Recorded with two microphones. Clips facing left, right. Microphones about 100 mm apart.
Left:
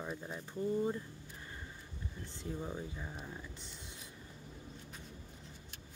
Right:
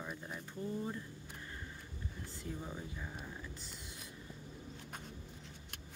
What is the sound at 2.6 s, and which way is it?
Speech, 10° left (ahead or behind).